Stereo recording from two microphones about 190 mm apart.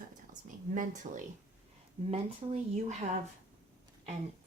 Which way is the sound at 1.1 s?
40° right (ahead or behind).